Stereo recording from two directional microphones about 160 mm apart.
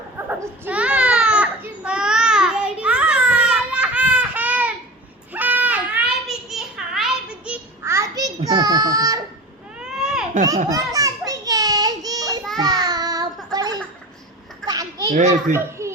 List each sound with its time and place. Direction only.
0.3 s baby cry: 10° right (ahead or behind)
5.3 s child singing: 10° right (ahead or behind)
9.7 s baby cry: 5° right (ahead or behind)
10.7 s children playing: 20° right (ahead or behind)
12.5 s a sound: 25° right (ahead or behind)
14.7 s children playing: 25° right (ahead or behind)
15.1 s a child's voice: 50° right (ahead or behind)
15.8 s a sound: 20° right (ahead or behind)